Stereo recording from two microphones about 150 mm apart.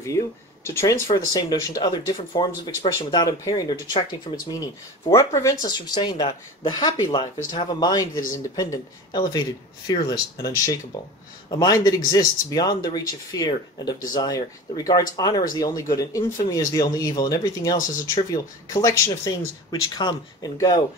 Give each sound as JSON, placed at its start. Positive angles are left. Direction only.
{"t": 0.7, "sound": "speech", "side_deg": 20}